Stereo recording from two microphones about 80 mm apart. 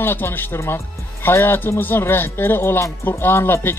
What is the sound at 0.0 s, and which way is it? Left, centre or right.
Speech, left.